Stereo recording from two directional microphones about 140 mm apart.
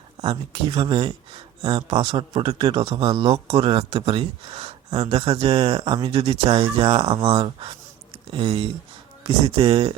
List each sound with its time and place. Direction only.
0.2 s speech: 45° right (ahead or behind)